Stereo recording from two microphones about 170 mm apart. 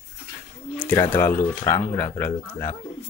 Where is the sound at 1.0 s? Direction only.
15° left (ahead or behind).